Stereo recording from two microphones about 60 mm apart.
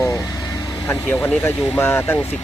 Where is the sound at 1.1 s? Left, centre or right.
Left.